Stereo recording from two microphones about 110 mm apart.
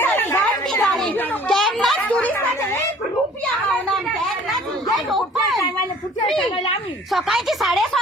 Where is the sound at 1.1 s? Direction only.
15° left (ahead or behind).